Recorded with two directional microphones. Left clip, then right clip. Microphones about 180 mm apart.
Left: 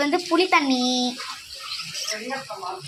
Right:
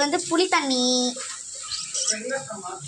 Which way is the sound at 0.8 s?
10° right (ahead or behind).